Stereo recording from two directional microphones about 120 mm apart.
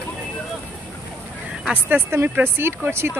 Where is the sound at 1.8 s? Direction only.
20° right (ahead or behind).